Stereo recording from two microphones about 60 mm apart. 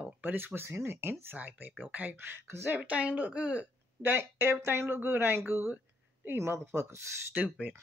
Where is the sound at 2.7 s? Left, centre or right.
Right.